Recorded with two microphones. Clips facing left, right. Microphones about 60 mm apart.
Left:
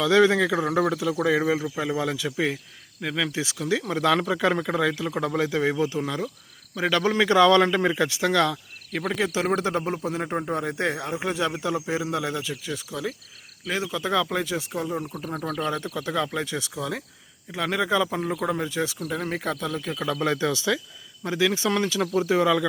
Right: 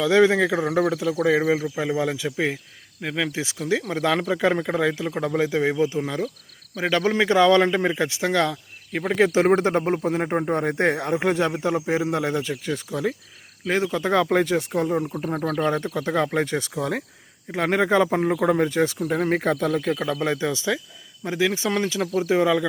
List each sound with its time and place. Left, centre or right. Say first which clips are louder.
0.0 s speech: right 1 dB; right
0.6 s speech: right 2 dB; centre
1.8 s speech: right 2 dB; right
9.1 s speech: right 8 dB; right
9.8 s speech: right 5 dB; right
10.6 s speech: right 5 dB; right
14.9 s speech: right 6 dB; centre
15.4 s speech: right 4 dB; right
19.0 s speech: right 6 dB; right
20.3 s speech: even; right
22.0 s speech: even; centre
22.3 s speech: right 2 dB; right